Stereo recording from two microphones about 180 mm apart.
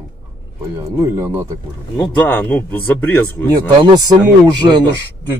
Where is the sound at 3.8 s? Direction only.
20° right (ahead or behind).